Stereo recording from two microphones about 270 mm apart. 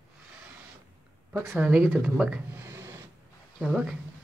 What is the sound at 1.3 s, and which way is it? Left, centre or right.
Speech, centre.